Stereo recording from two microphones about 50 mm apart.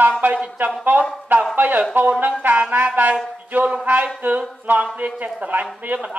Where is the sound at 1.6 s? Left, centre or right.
Right.